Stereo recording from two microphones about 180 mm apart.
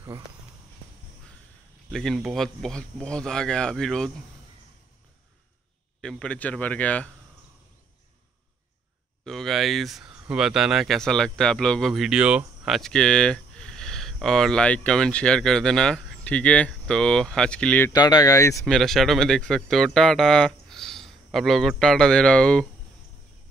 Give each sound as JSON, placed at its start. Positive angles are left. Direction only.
{"t": 1.9, "sound": "speech", "side_deg": 0}
{"t": 5.9, "sound": "speech", "side_deg": 5}
{"t": 9.2, "sound": "speech", "side_deg": 0}
{"t": 17.9, "sound": "speech", "side_deg": 20}
{"t": 18.7, "sound": "speech", "side_deg": 0}